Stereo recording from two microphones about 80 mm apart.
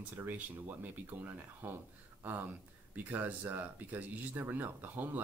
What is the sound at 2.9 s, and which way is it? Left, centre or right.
Speech, right.